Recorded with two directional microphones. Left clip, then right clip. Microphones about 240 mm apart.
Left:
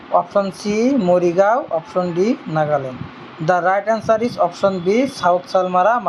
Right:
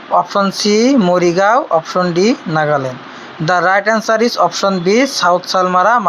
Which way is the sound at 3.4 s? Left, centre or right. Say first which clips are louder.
Right 4 dB; centre.